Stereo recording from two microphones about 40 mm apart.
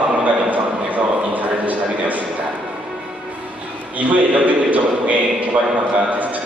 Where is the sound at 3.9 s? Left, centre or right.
Right.